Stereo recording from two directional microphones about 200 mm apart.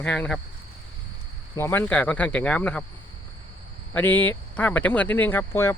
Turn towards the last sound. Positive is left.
turn(degrees=10)  # may be behind; listen again after turning